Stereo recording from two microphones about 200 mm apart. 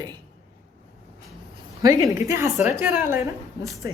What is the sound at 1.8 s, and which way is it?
A woman's voice, 15° right (ahead or behind).